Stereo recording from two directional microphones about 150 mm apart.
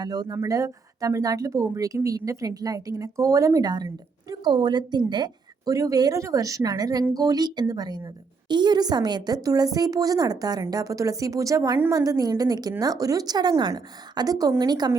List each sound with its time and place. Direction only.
0.0 s speech: 25° right (ahead or behind)